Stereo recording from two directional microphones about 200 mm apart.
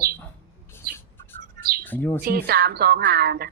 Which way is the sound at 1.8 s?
10° left (ahead or behind).